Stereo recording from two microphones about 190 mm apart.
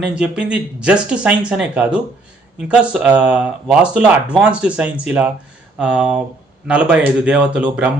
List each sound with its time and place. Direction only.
0.0 s speech: 5° right (ahead or behind)